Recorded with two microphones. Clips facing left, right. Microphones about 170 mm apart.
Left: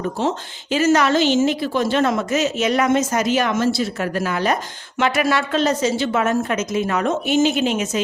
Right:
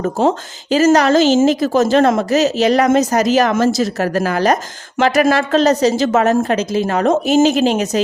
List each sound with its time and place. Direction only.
0.7 s speech: 40° right (ahead or behind)